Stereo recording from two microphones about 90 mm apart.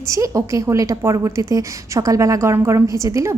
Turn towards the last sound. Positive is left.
turn(degrees=-35)  # may be behind; listen again after turning